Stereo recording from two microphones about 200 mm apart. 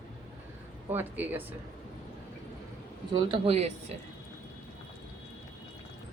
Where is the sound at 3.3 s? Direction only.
30° right (ahead or behind).